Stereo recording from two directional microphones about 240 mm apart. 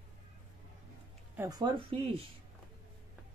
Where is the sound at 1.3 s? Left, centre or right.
Centre.